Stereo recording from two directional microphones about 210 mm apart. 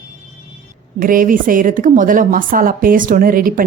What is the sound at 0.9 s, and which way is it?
A woman's voice, 40° right (ahead or behind).